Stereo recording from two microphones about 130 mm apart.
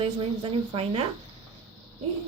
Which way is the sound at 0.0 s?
45° right (ahead or behind).